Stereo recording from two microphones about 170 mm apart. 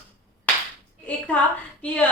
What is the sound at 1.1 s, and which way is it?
A woman's voice, 10° left (ahead or behind).